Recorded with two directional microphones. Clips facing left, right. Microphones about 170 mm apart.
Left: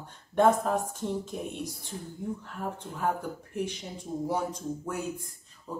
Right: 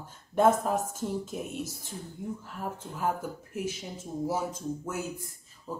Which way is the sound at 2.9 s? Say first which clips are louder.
Even; 5° right (ahead or behind).